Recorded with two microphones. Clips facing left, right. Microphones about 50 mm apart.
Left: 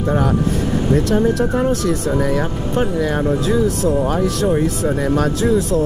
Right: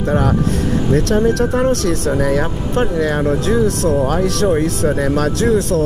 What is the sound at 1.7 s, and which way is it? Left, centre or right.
Speech, right.